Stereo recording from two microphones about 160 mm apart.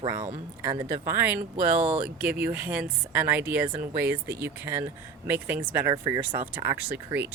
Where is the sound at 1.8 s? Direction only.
40° right (ahead or behind).